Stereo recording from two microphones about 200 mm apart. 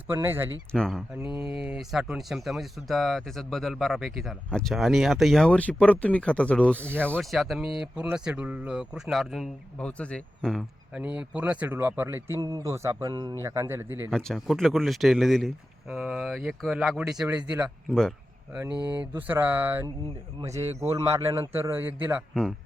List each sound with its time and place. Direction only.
0.1 s a man's voice: 10° right (ahead or behind)
0.7 s a man's voice: centre (ahead or behind)
14.1 s speech: centre (ahead or behind)
18.7 s speech: 20° left (ahead or behind)
18.9 s a man's voice: 10° right (ahead or behind)